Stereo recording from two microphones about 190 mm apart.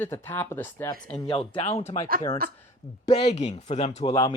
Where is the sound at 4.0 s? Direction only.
25° left (ahead or behind).